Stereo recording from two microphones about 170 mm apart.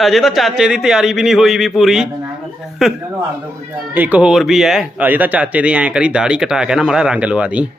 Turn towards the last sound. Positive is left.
turn(degrees=-5)  # may be behind; listen again after turning